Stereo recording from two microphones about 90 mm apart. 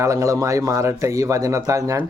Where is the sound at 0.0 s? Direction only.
35° right (ahead or behind).